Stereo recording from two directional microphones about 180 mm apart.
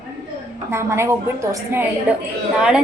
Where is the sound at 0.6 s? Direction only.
15° right (ahead or behind).